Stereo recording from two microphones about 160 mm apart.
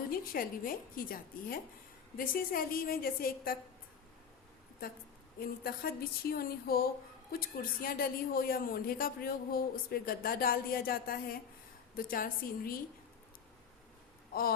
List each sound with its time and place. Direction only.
0.1 s speech: 65° left (ahead or behind)
5.4 s speech: 70° left (ahead or behind)